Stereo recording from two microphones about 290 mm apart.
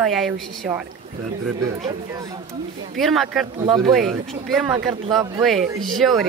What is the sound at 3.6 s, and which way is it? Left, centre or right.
Speech, centre.